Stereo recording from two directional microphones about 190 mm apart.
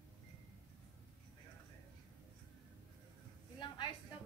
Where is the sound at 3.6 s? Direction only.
25° left (ahead or behind).